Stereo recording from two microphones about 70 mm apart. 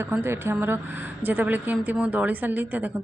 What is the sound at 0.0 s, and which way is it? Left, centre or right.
Speech, right.